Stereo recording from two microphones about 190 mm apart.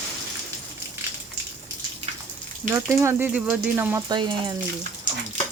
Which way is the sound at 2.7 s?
15° right (ahead or behind).